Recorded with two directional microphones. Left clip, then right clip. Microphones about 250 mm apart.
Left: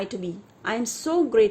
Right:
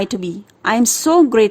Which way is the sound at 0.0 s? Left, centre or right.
Right.